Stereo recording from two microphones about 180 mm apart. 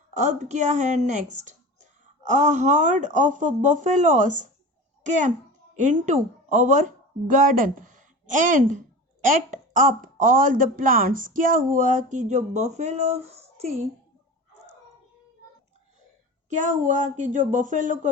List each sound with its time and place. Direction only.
0.1 s speech: 40° right (ahead or behind)
16.6 s speech: 45° right (ahead or behind)